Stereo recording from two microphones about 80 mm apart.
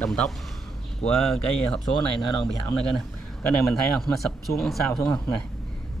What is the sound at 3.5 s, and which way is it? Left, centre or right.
A man's voice, centre.